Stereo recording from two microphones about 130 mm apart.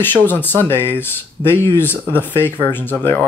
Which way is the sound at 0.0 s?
15° left (ahead or behind).